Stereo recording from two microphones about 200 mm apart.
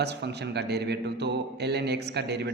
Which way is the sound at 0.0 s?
55° right (ahead or behind).